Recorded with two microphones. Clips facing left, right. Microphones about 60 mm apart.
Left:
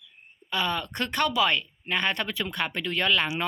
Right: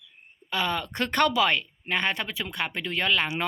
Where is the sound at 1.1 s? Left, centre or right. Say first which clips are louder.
Right 4 dB; right.